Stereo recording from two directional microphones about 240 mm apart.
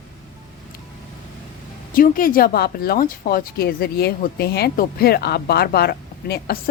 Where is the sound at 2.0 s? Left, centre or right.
Left.